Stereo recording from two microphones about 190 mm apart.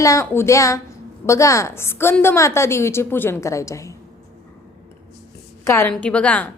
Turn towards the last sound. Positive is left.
turn(degrees=5)  # may be behind; listen again after turning